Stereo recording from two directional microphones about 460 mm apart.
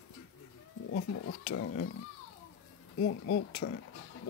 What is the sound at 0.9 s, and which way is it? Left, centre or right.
Speech, left.